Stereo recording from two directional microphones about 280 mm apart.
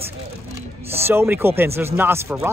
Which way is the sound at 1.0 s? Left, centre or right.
Centre.